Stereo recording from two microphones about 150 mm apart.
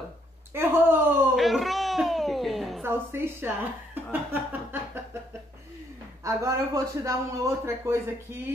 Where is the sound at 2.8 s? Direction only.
15° right (ahead or behind).